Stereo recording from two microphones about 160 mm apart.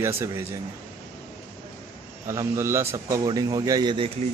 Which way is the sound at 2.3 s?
15° right (ahead or behind).